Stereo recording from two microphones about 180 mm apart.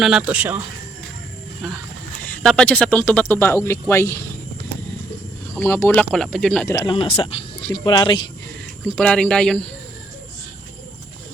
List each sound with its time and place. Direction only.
0.0 s speech: 5° right (ahead or behind)
2.2 s speech: 5° left (ahead or behind)
5.5 s speech: 15° left (ahead or behind)
6.7 s speech: 20° left (ahead or behind)
6.9 s speech: 30° left (ahead or behind)
9.0 s speech: 5° left (ahead or behind)